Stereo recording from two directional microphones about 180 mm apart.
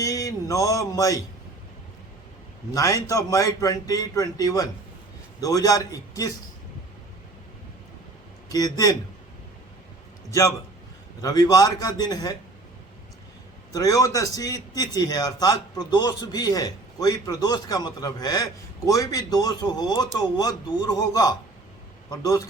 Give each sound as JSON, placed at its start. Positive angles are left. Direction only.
{"t": 0.0, "sound": "speech", "side_deg": 20}
{"t": 2.7, "sound": "a man's voice", "side_deg": 20}
{"t": 8.4, "sound": "a man's voice", "side_deg": 20}
{"t": 11.2, "sound": "a man's voice", "side_deg": 20}
{"t": 13.7, "sound": "a man's voice", "side_deg": 20}